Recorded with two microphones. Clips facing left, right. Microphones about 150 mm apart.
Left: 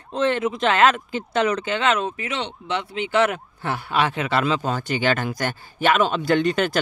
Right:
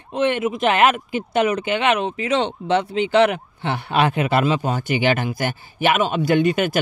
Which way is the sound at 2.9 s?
25° right (ahead or behind).